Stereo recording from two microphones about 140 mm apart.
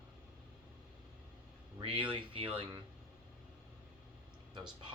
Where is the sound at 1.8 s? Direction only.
40° right (ahead or behind).